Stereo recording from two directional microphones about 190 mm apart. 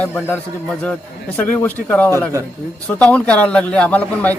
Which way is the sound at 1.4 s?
10° left (ahead or behind).